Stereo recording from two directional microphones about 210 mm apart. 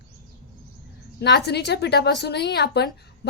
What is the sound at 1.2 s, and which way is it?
A woman's voice, 55° left (ahead or behind).